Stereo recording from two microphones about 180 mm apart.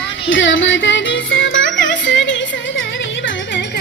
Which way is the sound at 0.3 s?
90° left.